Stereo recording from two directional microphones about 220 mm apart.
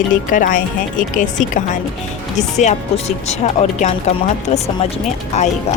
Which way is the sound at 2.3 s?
30° left (ahead or behind).